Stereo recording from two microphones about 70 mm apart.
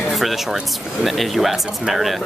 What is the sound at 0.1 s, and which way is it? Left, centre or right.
Speech, centre.